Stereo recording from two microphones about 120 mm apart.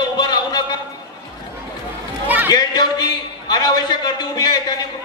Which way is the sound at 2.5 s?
35° left (ahead or behind).